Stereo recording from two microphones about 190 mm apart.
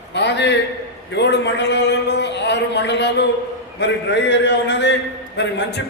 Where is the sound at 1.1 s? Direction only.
65° left (ahead or behind).